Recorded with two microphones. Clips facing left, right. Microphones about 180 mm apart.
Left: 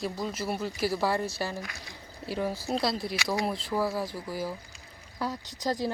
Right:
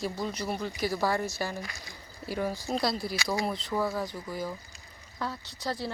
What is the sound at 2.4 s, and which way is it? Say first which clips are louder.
Speech: left 1 dB; 5° left (ahead or behind).